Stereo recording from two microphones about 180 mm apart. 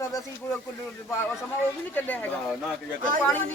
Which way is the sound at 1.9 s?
10° left (ahead or behind).